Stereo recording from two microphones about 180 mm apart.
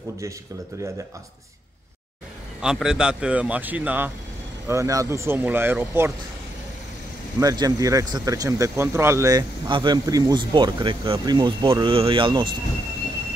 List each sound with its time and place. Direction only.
2.6 s speech: 5° right (ahead or behind)
7.3 s speech: 20° right (ahead or behind)